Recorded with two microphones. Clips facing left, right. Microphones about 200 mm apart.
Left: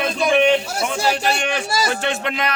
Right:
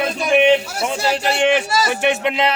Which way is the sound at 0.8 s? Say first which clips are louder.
Right 1 dB; 35° right (ahead or behind).